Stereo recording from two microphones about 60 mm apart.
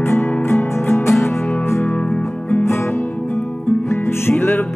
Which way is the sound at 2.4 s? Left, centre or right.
Left.